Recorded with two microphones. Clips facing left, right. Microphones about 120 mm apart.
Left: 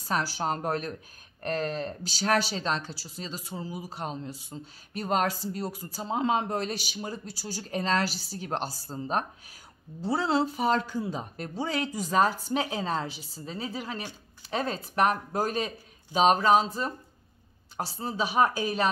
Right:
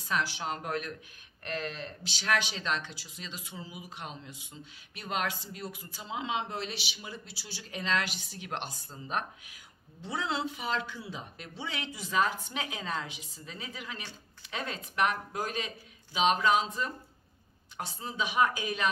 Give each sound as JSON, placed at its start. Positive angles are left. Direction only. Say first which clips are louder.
{"t": 0.0, "sound": "speech", "louder": "left 4 dB", "side_deg": 40}